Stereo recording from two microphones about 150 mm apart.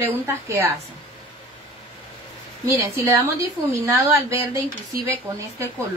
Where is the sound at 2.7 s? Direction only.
20° right (ahead or behind).